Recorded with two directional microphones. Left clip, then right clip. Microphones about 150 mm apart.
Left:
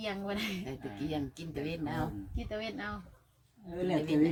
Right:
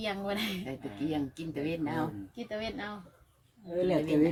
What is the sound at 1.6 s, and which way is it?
Speech, 15° left (ahead or behind).